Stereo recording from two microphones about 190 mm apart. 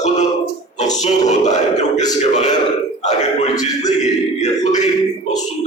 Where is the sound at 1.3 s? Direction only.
40° left (ahead or behind).